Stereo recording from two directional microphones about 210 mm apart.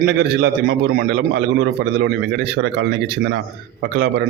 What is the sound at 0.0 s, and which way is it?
A man's voice, 50° right (ahead or behind).